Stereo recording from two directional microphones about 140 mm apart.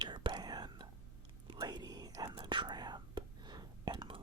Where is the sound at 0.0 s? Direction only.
35° right (ahead or behind).